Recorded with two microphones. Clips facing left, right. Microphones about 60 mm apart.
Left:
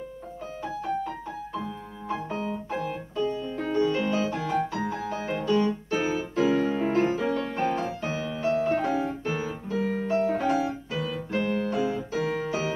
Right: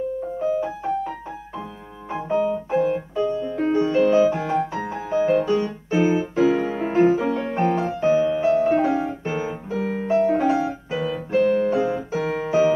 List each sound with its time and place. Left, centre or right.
0.4 s keyboard: right
2.0 s music: right
2.3 s piano: centre
5.1 s music: centre
11.9 s piano: right